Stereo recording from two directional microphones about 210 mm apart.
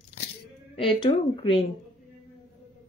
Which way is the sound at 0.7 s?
25° left (ahead or behind).